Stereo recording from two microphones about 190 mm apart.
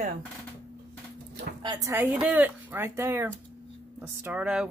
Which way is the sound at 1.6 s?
25° right (ahead or behind).